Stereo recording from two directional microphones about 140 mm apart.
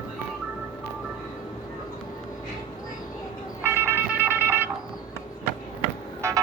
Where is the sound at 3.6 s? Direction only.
15° right (ahead or behind).